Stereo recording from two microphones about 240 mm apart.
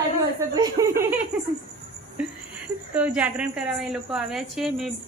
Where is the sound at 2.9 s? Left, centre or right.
Centre.